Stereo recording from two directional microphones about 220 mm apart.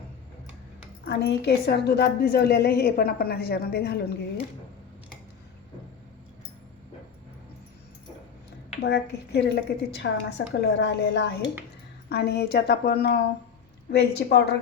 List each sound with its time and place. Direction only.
1.0 s a woman's voice: 50° left (ahead or behind)
8.8 s a woman's voice: 45° left (ahead or behind)